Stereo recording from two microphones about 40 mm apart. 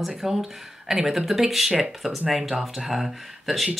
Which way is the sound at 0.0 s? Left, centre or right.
Centre.